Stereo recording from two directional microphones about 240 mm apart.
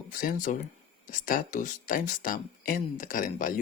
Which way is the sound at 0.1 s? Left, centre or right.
Left.